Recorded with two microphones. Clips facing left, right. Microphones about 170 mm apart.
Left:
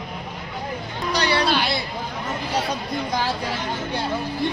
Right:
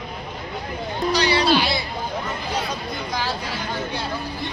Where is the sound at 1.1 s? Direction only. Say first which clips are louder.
Right 2 dB; 55° left (ahead or behind).